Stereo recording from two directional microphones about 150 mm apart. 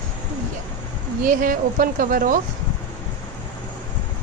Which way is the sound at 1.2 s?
65° right (ahead or behind).